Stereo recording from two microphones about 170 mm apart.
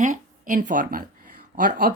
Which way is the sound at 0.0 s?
50° right (ahead or behind).